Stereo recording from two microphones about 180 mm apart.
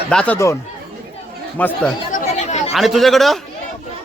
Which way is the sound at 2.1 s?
45° left (ahead or behind).